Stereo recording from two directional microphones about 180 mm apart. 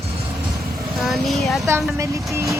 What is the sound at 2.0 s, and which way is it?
Speech, 15° right (ahead or behind).